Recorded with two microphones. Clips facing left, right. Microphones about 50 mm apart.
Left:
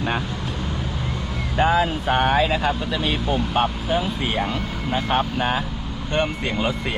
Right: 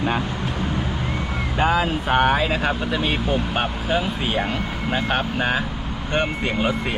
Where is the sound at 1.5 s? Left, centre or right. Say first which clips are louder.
Left 1 dB; centre.